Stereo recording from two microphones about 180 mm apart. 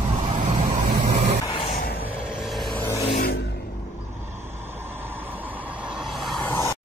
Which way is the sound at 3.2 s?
60° left (ahead or behind).